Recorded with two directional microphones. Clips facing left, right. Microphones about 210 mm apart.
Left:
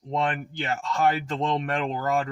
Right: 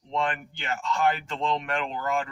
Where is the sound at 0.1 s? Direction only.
40° left (ahead or behind).